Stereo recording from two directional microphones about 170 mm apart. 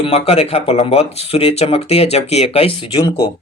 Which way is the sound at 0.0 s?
35° left (ahead or behind).